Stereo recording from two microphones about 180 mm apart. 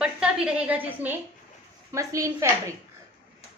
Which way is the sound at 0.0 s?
5° right (ahead or behind).